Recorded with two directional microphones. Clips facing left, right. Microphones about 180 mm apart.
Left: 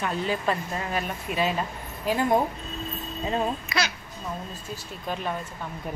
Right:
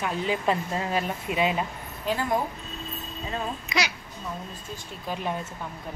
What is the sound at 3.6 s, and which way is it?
Speech, 15° right (ahead or behind).